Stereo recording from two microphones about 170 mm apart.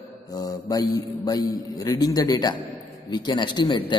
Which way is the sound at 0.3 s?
20° left (ahead or behind).